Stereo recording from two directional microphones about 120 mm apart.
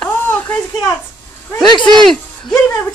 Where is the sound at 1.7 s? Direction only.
40° left (ahead or behind).